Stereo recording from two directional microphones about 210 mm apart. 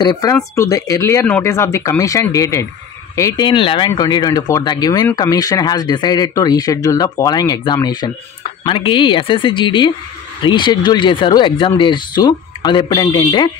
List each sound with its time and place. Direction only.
0.0 s speech: 20° left (ahead or behind)